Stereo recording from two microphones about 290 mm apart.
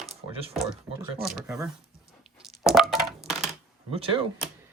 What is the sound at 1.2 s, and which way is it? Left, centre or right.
Chopping, centre.